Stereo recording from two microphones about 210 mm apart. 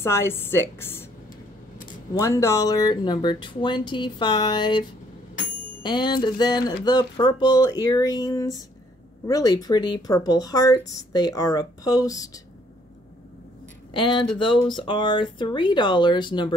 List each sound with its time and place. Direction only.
0.0 s speech: 10° left (ahead or behind)
2.1 s speech: 15° left (ahead or behind)
13.9 s speech: 20° left (ahead or behind)